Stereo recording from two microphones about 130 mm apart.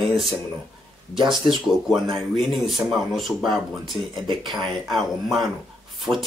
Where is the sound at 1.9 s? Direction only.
Centre (ahead or behind).